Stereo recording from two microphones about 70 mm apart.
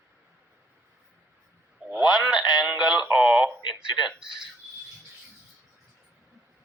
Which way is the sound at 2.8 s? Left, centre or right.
Centre.